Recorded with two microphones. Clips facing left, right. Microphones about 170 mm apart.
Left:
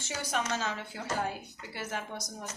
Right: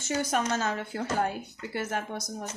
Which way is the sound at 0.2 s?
45° right (ahead or behind).